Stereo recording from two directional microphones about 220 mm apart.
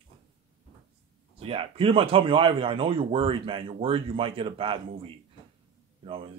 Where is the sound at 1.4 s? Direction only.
25° right (ahead or behind).